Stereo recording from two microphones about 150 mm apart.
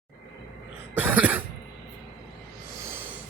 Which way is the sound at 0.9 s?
10° right (ahead or behind).